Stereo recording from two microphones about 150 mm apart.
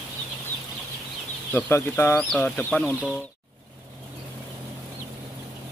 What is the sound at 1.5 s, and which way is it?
Speech, 15° left (ahead or behind).